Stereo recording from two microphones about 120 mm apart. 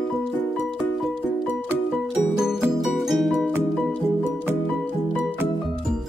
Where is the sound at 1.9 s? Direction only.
5° right (ahead or behind).